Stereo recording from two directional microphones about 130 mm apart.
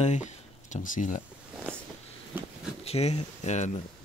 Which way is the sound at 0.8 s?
85° left.